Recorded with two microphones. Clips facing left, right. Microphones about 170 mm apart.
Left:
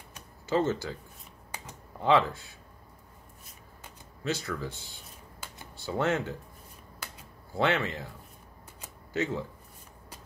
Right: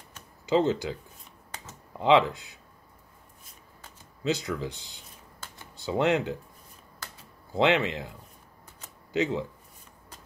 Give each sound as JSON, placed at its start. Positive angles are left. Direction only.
{"t": 0.5, "sound": "speech", "side_deg": -15}
{"t": 2.0, "sound": "speech", "side_deg": -15}
{"t": 4.2, "sound": "speech", "side_deg": -20}
{"t": 7.5, "sound": "speech", "side_deg": -20}
{"t": 9.1, "sound": "speech", "side_deg": -15}